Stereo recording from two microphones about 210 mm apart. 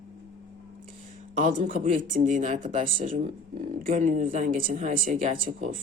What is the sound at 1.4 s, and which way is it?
Speech, 40° right (ahead or behind).